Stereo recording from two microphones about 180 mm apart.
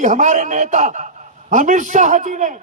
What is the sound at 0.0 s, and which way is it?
A man's voice, 45° right (ahead or behind).